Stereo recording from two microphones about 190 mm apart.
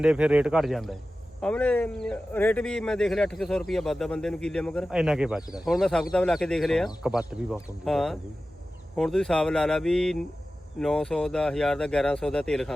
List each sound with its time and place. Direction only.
0.0 s speech: 5° right (ahead or behind)
5.4 s speech: 20° left (ahead or behind)
5.6 s speech: centre (ahead or behind)